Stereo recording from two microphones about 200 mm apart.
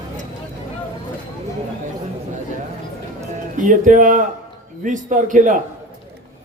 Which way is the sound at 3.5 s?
40° right (ahead or behind).